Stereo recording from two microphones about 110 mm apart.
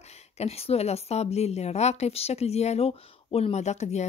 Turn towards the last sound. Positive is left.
turn(degrees=90)